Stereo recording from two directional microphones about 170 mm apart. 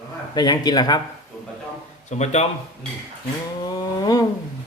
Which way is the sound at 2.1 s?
40° left (ahead or behind).